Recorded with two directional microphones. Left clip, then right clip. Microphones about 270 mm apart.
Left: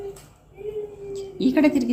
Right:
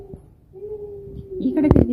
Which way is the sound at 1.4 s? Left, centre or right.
Centre.